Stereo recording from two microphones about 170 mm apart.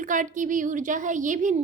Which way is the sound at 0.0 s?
50° right (ahead or behind).